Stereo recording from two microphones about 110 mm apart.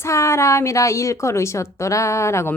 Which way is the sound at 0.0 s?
25° left (ahead or behind).